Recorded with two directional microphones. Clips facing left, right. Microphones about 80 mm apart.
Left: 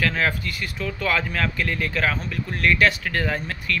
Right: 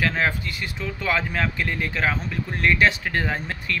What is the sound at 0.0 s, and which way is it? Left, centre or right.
Speech, right.